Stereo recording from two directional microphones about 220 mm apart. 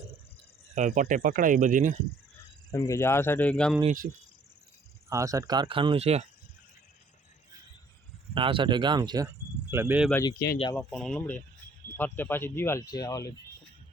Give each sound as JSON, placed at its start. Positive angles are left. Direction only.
{"t": 0.8, "sound": "speech", "side_deg": -35}
{"t": 2.7, "sound": "speech", "side_deg": 15}
{"t": 5.0, "sound": "speech", "side_deg": -15}
{"t": 8.4, "sound": "speech", "side_deg": -25}
{"t": 10.1, "sound": "speech", "side_deg": 10}